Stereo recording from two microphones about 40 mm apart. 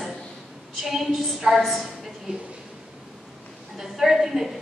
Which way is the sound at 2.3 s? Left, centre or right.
Right.